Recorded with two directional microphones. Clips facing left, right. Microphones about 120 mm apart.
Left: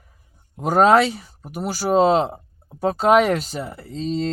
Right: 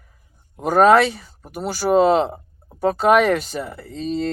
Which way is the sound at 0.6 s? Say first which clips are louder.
Right 1 dB; 15° left (ahead or behind).